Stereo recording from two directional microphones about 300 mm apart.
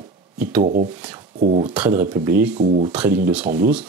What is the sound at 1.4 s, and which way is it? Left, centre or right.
Speech, right.